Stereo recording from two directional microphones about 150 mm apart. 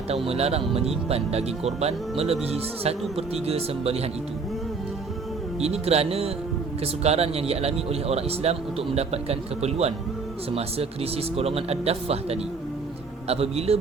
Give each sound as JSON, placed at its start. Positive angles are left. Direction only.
{"t": 0.3, "sound": "speech", "side_deg": -45}
{"t": 5.5, "sound": "speech", "side_deg": -45}